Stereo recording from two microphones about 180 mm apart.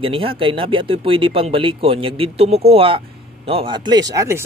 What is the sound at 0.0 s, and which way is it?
Speech, 30° right (ahead or behind).